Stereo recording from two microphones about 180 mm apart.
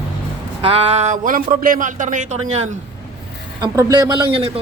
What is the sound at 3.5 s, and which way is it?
Speech, 20° right (ahead or behind).